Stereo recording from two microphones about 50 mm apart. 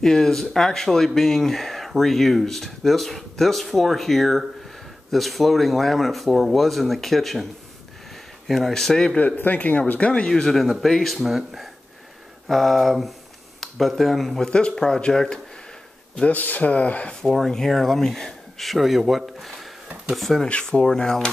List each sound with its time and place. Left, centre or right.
0.0 s speech: centre
8.5 s speech: centre
9.2 s speech: left
10.3 s speech: centre
14.4 s speech: centre
16.3 s speech: left
17.3 s speech: centre